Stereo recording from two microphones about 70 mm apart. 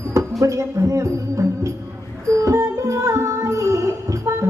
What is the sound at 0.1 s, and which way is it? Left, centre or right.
Music, right.